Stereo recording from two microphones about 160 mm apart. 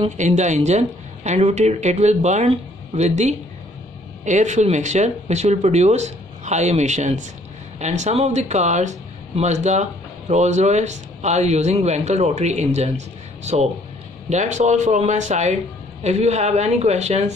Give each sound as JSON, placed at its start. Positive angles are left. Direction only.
{"t": 0.2, "sound": "speech", "side_deg": -50}